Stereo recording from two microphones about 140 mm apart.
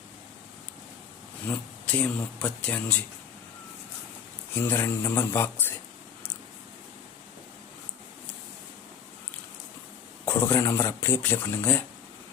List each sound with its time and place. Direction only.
1.5 s speech: 10° left (ahead or behind)
4.5 s speech: 15° left (ahead or behind)
10.2 s speech: 15° left (ahead or behind)